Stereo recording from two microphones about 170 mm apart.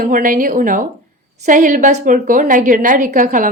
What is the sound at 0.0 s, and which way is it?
A woman's voice, 55° right (ahead or behind).